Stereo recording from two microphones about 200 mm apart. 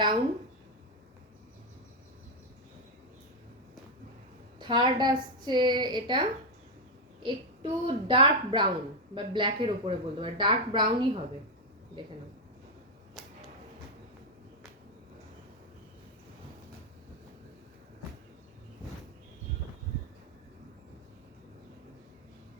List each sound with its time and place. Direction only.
4.6 s speech: 20° right (ahead or behind)